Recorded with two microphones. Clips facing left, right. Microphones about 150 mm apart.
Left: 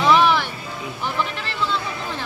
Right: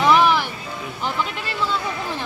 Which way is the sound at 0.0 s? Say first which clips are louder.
Even; 10° right (ahead or behind).